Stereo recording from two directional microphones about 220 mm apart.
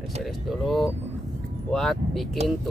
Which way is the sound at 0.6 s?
Centre (ahead or behind).